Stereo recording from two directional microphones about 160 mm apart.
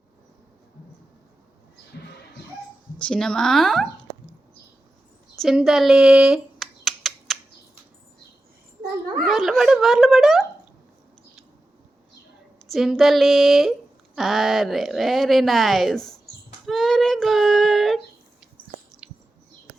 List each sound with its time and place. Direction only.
1.9 s a sound: 90° left
3.0 s speech: 5° left (ahead or behind)
5.4 s computer keyboard: centre (ahead or behind)
9.2 s speech: centre (ahead or behind)
12.7 s speech: centre (ahead or behind)
19.0 s a sound: 10° right (ahead or behind)